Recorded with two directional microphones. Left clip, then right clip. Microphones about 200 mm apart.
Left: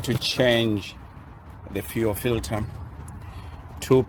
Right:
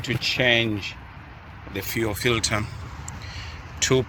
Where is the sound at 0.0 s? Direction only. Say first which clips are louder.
Even; 40° left (ahead or behind).